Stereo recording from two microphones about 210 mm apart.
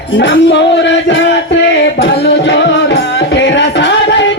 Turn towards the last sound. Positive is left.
turn(degrees=60)  # may be behind; listen again after turning